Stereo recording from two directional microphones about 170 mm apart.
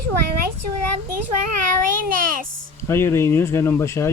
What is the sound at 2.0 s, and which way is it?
Speech, 55° right (ahead or behind).